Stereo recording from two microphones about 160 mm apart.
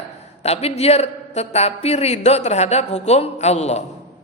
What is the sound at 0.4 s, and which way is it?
A man's voice, 40° left (ahead or behind).